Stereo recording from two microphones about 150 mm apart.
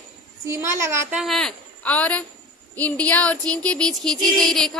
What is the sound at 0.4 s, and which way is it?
Speech, 15° right (ahead or behind).